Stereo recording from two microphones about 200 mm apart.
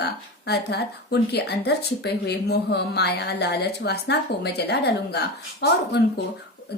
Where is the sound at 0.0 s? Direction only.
55° left (ahead or behind).